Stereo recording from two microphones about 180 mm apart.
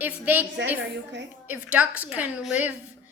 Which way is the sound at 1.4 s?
10° right (ahead or behind).